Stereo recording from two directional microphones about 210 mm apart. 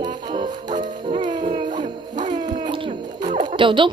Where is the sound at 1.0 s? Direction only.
20° right (ahead or behind).